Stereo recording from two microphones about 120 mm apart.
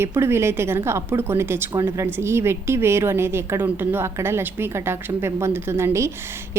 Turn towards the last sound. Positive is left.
turn(degrees=-20)  # may be behind; listen again after turning